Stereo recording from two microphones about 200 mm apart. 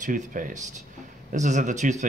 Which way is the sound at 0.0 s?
40° right (ahead or behind).